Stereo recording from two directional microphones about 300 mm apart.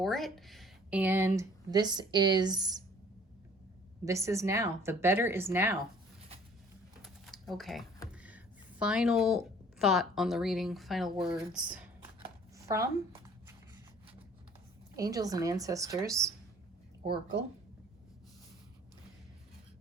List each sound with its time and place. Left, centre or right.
0.0 s speech: centre
4.0 s speech: centre
7.0 s typing: centre
8.8 s speech: centre
12.5 s a sound: centre
14.9 s speech: centre